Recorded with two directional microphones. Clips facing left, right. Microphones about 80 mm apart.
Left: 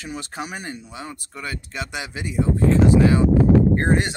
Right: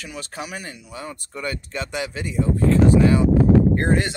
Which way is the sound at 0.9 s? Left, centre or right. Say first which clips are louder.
Right 1 dB; centre.